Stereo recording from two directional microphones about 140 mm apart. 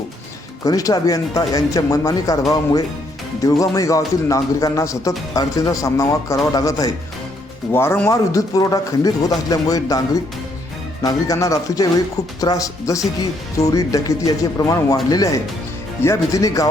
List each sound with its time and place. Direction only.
0.6 s speech: 25° left (ahead or behind)
3.4 s speech: 25° left (ahead or behind)
11.0 s speech: 25° left (ahead or behind)